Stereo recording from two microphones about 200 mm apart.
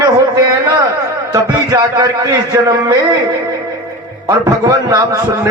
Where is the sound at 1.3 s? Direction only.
15° right (ahead or behind).